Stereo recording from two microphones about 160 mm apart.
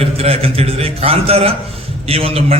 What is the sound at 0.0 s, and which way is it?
A man's voice, 40° right (ahead or behind).